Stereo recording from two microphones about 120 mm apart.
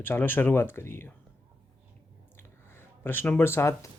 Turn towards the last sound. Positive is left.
turn(degrees=25)  # may be behind; listen again after turning